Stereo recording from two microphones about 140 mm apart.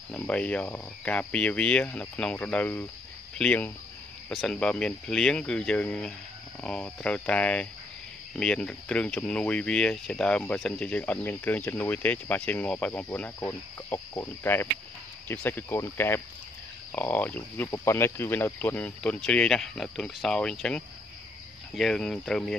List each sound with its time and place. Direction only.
0.1 s speech: 10° left (ahead or behind)